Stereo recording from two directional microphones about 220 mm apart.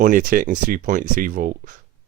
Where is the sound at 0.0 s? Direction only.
35° right (ahead or behind).